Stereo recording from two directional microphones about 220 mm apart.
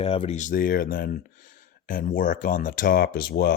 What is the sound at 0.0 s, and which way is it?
Speech, 25° left (ahead or behind).